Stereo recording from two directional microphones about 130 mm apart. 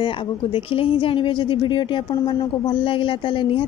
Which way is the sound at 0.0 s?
40° left (ahead or behind).